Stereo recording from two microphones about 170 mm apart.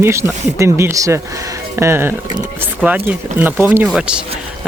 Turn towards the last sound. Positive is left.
turn(degrees=-5)  # may be behind; listen again after turning